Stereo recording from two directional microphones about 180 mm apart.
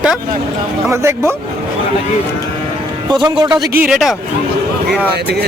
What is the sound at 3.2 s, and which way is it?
Speech, 25° right (ahead or behind).